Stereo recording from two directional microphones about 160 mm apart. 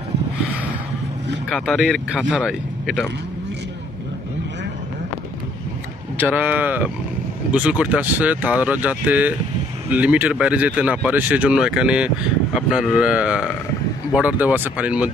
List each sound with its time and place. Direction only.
1.5 s speech: 5° left (ahead or behind)
6.1 s speech: 10° right (ahead or behind)